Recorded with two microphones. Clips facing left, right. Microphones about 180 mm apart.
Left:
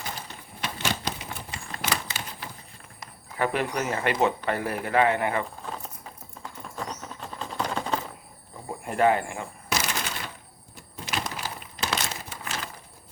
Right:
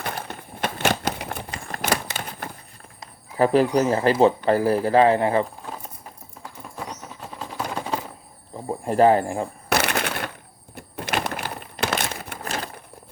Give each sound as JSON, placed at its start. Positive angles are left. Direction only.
{"t": 0.0, "sound": "typewriter", "side_deg": -60}
{"t": 3.3, "sound": "speech", "side_deg": -35}
{"t": 6.4, "sound": "patter", "side_deg": -5}
{"t": 8.8, "sound": "speech", "side_deg": -35}
{"t": 9.6, "sound": "shuffling cards", "side_deg": -65}
{"t": 10.8, "sound": "a sound", "side_deg": -60}
{"t": 12.4, "sound": "a sound", "side_deg": -40}